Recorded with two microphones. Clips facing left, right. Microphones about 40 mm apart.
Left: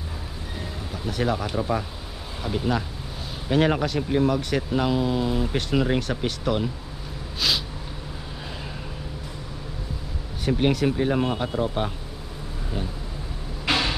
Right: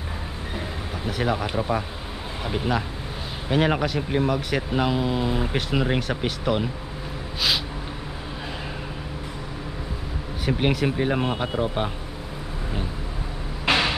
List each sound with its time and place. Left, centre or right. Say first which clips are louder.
0.9 s speech: even; centre
3.4 s speech: even; centre
7.3 s a sound: right 1 dB; centre
10.4 s speech: left 1 dB; centre
13.7 s vehicle: right 2 dB; right